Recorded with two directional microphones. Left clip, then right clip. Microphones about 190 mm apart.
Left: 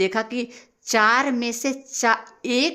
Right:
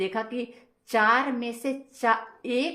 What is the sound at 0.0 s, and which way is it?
Speech, 40° left (ahead or behind).